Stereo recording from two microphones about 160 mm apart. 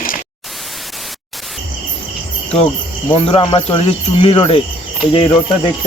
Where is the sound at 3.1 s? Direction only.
35° left (ahead or behind).